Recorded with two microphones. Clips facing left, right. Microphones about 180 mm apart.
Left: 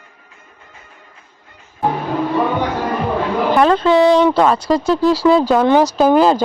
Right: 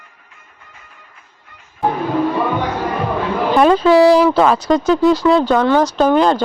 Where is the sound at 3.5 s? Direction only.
10° right (ahead or behind).